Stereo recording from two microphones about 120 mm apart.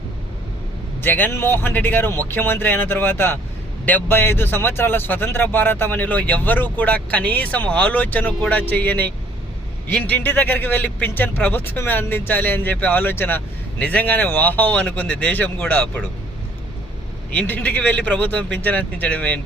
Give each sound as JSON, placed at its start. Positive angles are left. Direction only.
{"t": 1.0, "sound": "a man's voice", "side_deg": 15}
{"t": 17.3, "sound": "a man's voice", "side_deg": 15}